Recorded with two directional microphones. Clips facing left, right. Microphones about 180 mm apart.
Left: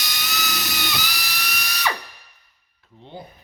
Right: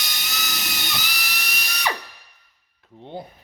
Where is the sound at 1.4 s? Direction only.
25° right (ahead or behind).